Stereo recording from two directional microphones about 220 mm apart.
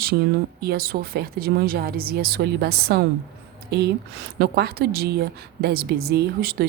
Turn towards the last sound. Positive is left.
turn(degrees=-45)  # may be behind; listen again after turning